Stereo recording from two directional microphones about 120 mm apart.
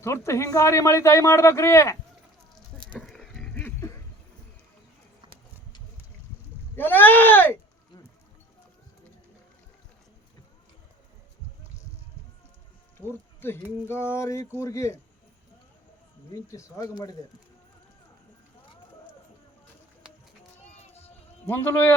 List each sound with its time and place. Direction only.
0.0 s speech: 20° left (ahead or behind)
2.7 s a sound: 5° left (ahead or behind); by 3.9 s 20° left (ahead or behind)
6.7 s speech: 15° left (ahead or behind)
13.1 s speech: 20° left (ahead or behind)
16.3 s speech: 25° left (ahead or behind)
20.7 s a sound: 60° left (ahead or behind)
21.4 s speech: 15° left (ahead or behind)